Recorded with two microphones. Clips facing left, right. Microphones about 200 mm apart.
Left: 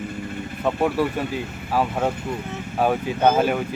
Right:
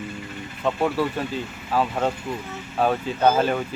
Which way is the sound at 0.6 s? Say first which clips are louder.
Left 1 dB; 10° left (ahead or behind).